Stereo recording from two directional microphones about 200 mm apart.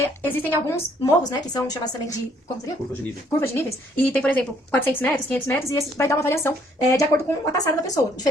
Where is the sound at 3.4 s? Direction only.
10° left (ahead or behind).